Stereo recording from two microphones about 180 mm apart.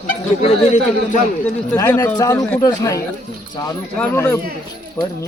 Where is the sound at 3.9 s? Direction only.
5° left (ahead or behind).